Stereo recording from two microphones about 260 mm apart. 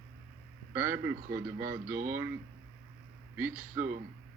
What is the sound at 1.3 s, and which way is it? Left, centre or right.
Speech, right.